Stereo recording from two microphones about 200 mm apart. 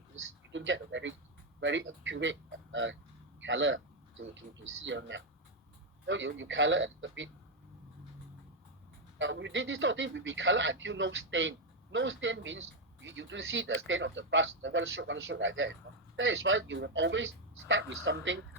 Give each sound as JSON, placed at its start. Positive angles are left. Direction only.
{"t": 0.5, "sound": "speech", "side_deg": -65}
{"t": 9.1, "sound": "speech", "side_deg": -70}